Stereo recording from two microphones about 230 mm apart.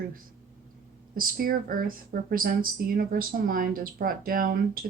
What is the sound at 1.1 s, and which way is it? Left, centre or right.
A woman's voice, right.